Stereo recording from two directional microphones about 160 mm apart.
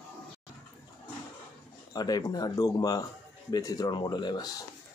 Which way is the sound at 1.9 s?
25° left (ahead or behind).